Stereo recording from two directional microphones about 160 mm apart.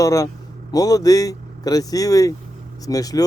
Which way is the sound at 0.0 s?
20° left (ahead or behind).